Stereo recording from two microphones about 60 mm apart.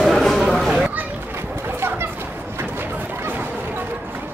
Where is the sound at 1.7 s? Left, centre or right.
Right.